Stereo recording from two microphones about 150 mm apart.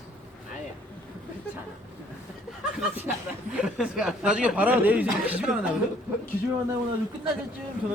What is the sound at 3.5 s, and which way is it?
Speech, 5° right (ahead or behind).